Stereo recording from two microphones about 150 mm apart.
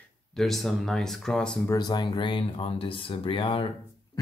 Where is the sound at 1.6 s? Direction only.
25° left (ahead or behind).